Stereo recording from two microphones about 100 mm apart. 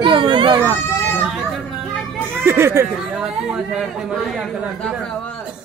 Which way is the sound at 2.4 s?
25° right (ahead or behind).